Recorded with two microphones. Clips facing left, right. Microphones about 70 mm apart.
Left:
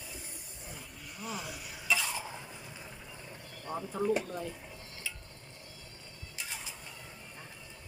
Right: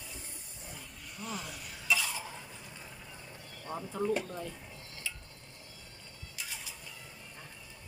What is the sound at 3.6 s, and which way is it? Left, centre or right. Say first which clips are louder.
Speech: left 2 dB; centre.